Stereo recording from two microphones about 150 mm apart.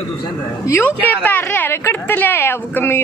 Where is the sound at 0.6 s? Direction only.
15° left (ahead or behind).